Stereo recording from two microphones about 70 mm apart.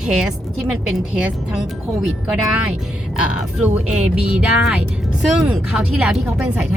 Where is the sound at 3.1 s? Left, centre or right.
Centre.